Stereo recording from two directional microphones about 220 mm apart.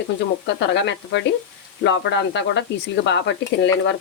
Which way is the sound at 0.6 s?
55° left (ahead or behind).